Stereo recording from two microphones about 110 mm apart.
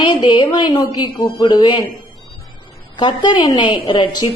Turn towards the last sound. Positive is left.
turn(degrees=45)  # may be behind; listen again after turning